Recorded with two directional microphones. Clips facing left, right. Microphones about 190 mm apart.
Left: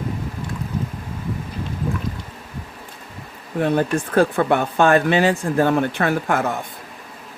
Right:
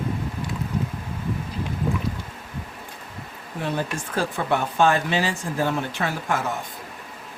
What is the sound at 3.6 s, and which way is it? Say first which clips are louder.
Speech: left 8 dB; 55° left (ahead or behind).